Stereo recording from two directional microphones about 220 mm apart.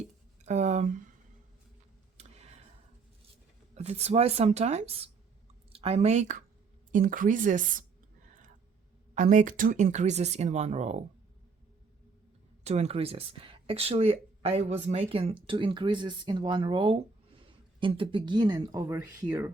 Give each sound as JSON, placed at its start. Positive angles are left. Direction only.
{"t": 0.4, "sound": "speech", "side_deg": -30}
{"t": 2.1, "sound": "a sound", "side_deg": -30}
{"t": 3.8, "sound": "speech", "side_deg": -30}
{"t": 9.1, "sound": "speech", "side_deg": -35}
{"t": 12.6, "sound": "speech", "side_deg": -30}